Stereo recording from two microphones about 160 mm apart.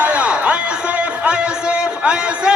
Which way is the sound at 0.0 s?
10° right (ahead or behind).